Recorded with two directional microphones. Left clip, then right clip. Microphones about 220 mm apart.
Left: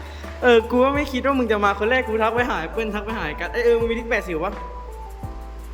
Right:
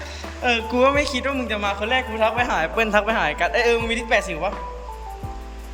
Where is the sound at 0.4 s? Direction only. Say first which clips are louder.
Left 3 dB; 20° left (ahead or behind).